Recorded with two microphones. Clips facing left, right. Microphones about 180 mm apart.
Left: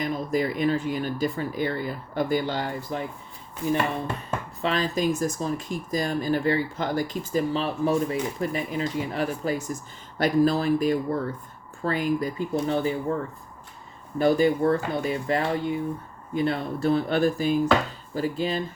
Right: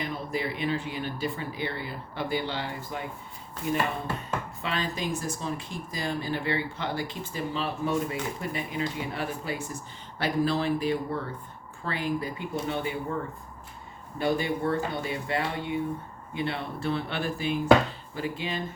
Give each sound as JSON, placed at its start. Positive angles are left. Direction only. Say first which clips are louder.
{"t": 0.0, "sound": "speech", "louder": "left 6 dB", "side_deg": 40}
{"t": 4.6, "sound": "speech", "louder": "left 9 dB", "side_deg": 40}
{"t": 14.2, "sound": "speech", "louder": "left 7 dB", "side_deg": 40}